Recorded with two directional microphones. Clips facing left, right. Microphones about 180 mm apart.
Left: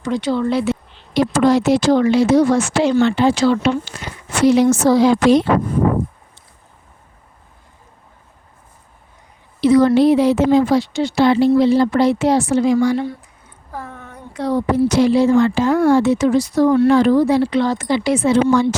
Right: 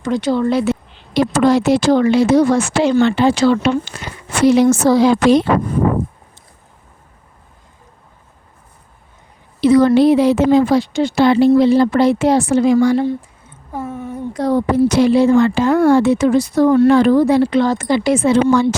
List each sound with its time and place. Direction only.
0.0 s a woman's voice: 45° right (ahead or behind)
1.1 s speech: 60° right (ahead or behind)
9.6 s speech: 65° right (ahead or behind)
13.0 s a sound: 25° right (ahead or behind)
14.3 s a woman's voice: 45° right (ahead or behind)